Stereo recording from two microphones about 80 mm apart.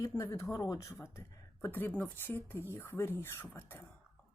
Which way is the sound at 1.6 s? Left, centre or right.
Left.